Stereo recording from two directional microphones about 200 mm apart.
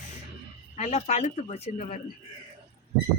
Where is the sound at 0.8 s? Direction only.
35° left (ahead or behind).